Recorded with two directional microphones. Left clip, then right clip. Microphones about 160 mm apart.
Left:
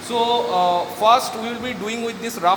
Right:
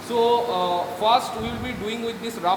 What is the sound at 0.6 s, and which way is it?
Speech, 40° left (ahead or behind).